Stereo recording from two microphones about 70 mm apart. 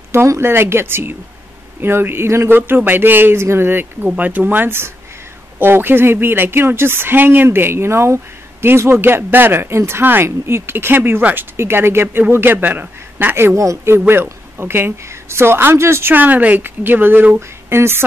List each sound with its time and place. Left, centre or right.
0.1 s speech: right
13.6 s a woman's voice: right